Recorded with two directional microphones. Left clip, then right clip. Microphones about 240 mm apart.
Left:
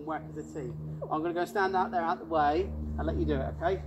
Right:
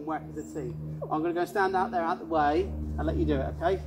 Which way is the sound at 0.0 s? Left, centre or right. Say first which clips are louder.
Right 2 dB; centre.